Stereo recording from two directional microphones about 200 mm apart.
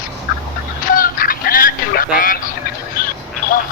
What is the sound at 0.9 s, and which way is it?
Duck, 45° left (ahead or behind).